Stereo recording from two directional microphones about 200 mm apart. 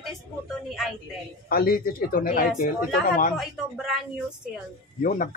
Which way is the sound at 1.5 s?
50° left (ahead or behind).